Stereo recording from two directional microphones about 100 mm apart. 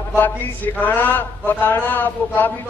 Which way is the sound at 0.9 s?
15° left (ahead or behind).